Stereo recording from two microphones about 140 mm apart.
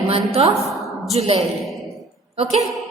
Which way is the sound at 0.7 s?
Centre (ahead or behind).